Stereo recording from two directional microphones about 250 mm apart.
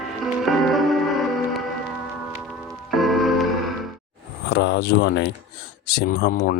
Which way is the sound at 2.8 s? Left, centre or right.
Centre.